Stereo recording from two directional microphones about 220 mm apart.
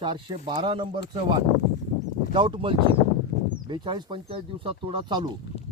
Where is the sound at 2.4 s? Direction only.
25° right (ahead or behind).